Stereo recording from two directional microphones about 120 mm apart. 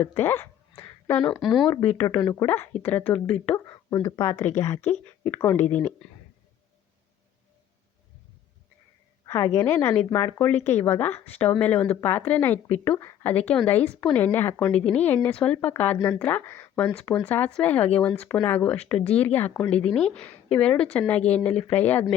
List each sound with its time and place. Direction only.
0.0 s a sound: 20° left (ahead or behind)
1.2 s speech: centre (ahead or behind)
1.8 s speech: 15° left (ahead or behind)
4.0 s speech: 25° left (ahead or behind)
9.2 s speech: 25° left (ahead or behind)